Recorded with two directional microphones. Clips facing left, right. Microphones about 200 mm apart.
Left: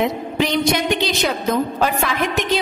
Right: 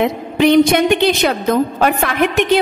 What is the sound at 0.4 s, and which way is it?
A woman's voice, 55° right (ahead or behind).